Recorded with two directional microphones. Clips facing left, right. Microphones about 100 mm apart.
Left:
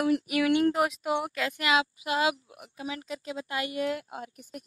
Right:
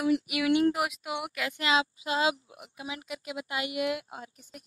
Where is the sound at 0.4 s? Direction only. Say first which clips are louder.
Left 2 dB; 20° right (ahead or behind).